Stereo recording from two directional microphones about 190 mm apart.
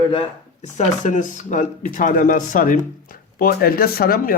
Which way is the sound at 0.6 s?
40° left (ahead or behind).